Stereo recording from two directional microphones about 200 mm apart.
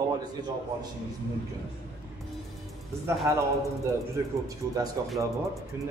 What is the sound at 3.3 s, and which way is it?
A man's voice, 15° right (ahead or behind).